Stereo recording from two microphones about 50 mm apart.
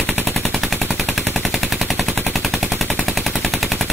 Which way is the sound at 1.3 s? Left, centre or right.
Centre.